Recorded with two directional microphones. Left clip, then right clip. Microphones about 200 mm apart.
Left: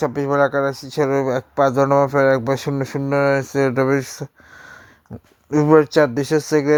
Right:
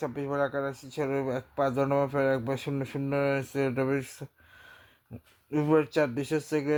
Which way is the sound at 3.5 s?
35° left (ahead or behind).